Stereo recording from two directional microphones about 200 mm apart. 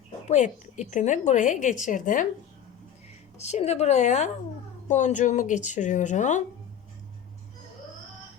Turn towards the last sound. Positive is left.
turn(degrees=35)  # may be behind; listen again after turning